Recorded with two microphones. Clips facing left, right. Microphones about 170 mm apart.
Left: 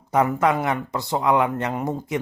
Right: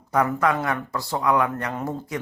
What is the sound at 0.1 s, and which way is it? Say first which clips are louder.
Speech: left 2 dB; 20° left (ahead or behind).